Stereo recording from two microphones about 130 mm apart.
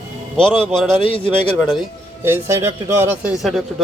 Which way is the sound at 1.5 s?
Centre (ahead or behind).